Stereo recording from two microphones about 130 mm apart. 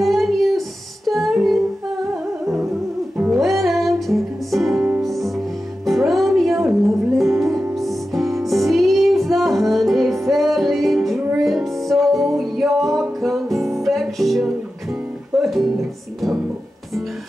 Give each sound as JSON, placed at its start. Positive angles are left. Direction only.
{"t": 0.0, "sound": "music", "side_deg": 0}
{"t": 3.3, "sound": "music", "side_deg": 0}
{"t": 7.4, "sound": "music", "side_deg": -20}
{"t": 7.7, "sound": "music", "side_deg": 0}